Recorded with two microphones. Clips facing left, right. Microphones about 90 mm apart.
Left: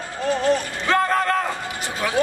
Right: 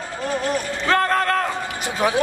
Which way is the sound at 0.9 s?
5° left (ahead or behind).